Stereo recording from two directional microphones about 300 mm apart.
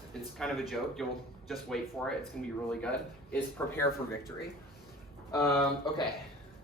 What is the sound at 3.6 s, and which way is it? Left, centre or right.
Speech, centre.